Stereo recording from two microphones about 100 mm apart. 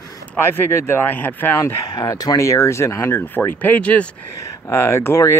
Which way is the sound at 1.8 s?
40° left (ahead or behind).